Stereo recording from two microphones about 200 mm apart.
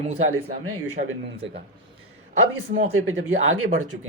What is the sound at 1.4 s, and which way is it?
Speech, 65° right (ahead or behind).